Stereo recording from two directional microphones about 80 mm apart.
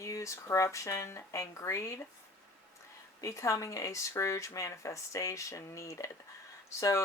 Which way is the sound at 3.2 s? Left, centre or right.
Left.